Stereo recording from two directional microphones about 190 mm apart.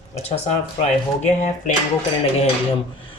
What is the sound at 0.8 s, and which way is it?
Speech, 35° left (ahead or behind).